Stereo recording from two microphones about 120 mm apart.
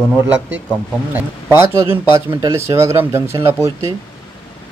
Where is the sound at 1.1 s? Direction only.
20° right (ahead or behind).